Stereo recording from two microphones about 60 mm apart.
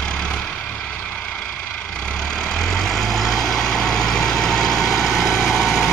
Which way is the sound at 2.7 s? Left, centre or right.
Centre.